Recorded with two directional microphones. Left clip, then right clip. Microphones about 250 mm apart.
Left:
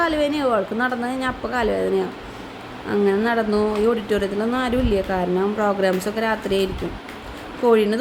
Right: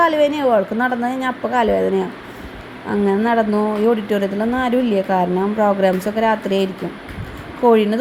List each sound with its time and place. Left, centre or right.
0.0 s a woman's voice: centre